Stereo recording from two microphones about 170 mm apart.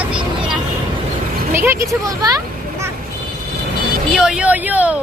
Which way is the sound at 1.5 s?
15° right (ahead or behind).